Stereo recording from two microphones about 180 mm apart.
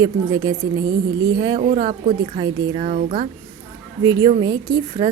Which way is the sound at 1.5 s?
45° right (ahead or behind).